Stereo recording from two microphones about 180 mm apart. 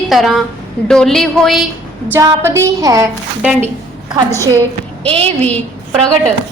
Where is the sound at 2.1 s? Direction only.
15° right (ahead or behind).